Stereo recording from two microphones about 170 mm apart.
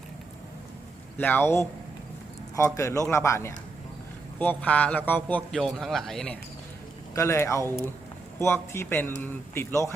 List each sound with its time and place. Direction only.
1.2 s a man's voice: 10° left (ahead or behind)
7.2 s a man's voice: 15° left (ahead or behind)